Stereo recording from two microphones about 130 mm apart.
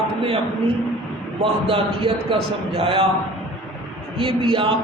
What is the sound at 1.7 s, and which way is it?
A man's voice, 40° right (ahead or behind).